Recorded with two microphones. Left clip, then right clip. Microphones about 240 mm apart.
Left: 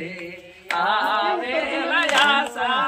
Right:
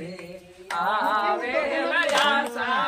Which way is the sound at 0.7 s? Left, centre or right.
Centre.